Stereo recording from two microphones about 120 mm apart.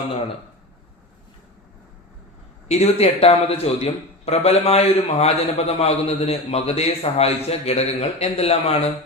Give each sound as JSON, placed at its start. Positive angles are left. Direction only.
{"t": 2.6, "sound": "a man's voice", "side_deg": 60}